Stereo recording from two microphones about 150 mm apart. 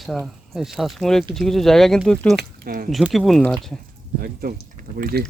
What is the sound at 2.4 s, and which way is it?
Speech, 85° right.